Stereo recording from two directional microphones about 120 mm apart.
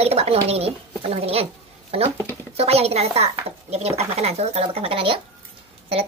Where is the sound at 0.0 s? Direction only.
60° right (ahead or behind).